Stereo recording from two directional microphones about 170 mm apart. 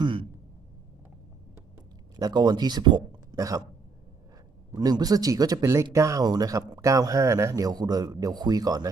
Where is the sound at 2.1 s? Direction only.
25° right (ahead or behind).